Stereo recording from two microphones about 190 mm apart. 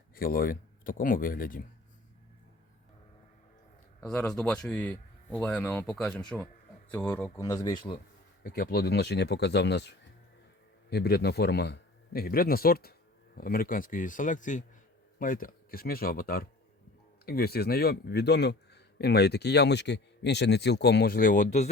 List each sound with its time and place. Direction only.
0.2 s speech: 50° left (ahead or behind)
4.0 s speech: 5° left (ahead or behind); by 7.9 s 25° left (ahead or behind)
8.4 s speech: 50° left (ahead or behind)